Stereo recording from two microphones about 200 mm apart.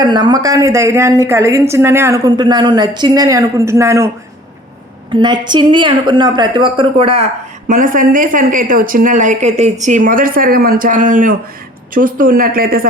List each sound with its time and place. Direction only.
0.0 s a woman's voice: 20° right (ahead or behind)
5.1 s a woman's voice: 20° right (ahead or behind)
7.7 s speech: 40° right (ahead or behind)